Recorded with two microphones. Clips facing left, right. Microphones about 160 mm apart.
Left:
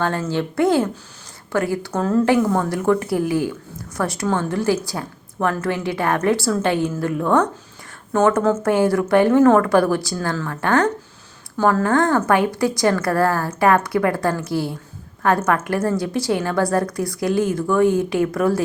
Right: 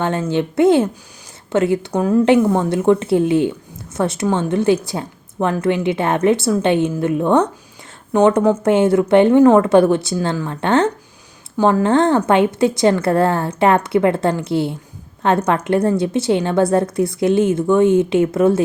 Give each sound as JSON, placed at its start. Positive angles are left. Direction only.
{"t": 0.0, "sound": "a woman's voice", "side_deg": -20}